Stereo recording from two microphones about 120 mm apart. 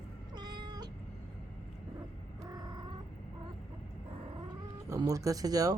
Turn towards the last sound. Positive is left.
turn(degrees=-30)  # may be behind; listen again after turning